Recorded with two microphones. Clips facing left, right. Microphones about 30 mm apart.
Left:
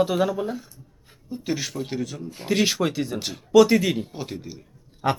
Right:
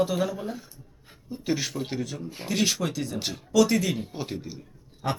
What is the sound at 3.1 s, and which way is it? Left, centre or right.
Speech, centre.